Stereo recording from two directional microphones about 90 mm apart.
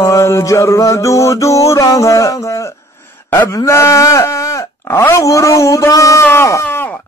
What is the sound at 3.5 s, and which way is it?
Speech, 35° left (ahead or behind).